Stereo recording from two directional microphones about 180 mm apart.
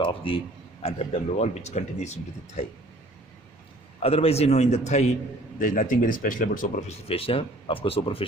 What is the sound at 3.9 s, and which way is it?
Speech, 35° left (ahead or behind).